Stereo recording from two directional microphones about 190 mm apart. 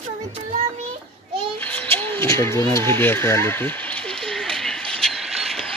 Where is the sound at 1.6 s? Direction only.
10° left (ahead or behind).